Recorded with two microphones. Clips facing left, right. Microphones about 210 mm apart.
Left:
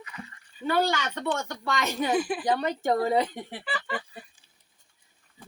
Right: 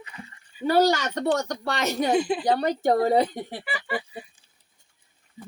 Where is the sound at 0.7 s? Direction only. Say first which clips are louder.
Right 5 dB; 40° right (ahead or behind).